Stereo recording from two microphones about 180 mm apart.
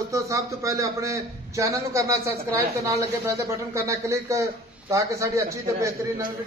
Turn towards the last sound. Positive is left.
turn(degrees=-15)  # may be behind; listen again after turning